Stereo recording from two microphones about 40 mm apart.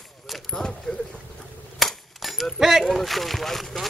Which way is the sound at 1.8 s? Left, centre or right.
Centre.